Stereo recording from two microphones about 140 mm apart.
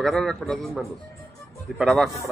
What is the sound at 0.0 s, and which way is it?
A man's voice, 5° left (ahead or behind).